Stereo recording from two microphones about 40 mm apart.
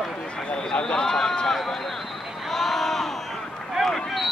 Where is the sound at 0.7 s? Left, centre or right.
Left.